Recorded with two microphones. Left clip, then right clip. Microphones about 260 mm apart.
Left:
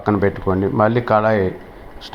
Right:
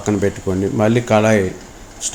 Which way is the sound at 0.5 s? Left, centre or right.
Centre.